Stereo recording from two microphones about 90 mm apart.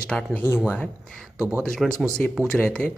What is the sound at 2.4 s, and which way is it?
Speech, 10° left (ahead or behind).